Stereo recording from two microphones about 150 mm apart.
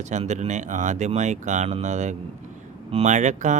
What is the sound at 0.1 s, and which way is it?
Speech, 50° right (ahead or behind).